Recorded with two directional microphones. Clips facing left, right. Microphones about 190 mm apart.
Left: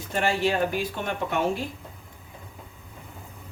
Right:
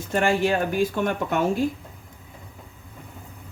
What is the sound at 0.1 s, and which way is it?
Speech, 50° right (ahead or behind).